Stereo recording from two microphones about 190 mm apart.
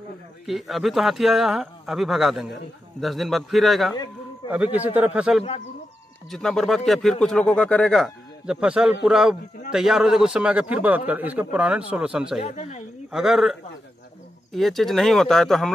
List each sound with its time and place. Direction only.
0.5 s a man's voice: centre (ahead or behind)
12.4 s speech: 35° left (ahead or behind)
13.1 s a man's voice: centre (ahead or behind)